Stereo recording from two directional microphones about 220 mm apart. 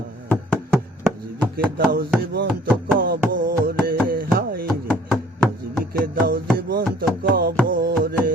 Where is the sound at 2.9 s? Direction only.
40° right (ahead or behind).